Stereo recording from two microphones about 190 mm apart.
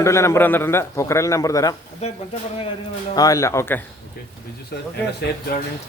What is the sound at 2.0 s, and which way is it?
Speech, 35° left (ahead or behind).